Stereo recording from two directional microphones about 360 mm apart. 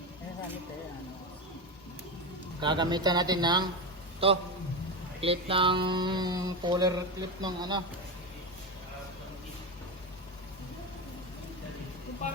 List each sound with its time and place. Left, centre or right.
2.6 s speech: centre